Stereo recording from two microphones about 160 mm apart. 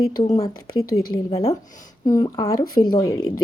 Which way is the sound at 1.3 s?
40° left (ahead or behind).